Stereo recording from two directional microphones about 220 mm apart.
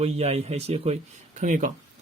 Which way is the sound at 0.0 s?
30° right (ahead or behind).